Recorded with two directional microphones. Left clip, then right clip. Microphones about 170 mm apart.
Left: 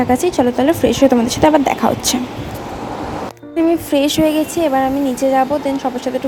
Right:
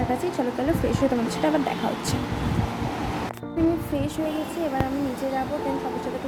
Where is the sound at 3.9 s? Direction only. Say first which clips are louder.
Left 14 dB; 55° left (ahead or behind).